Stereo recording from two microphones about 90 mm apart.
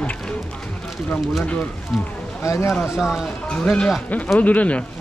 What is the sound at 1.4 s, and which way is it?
Speech, 15° left (ahead or behind).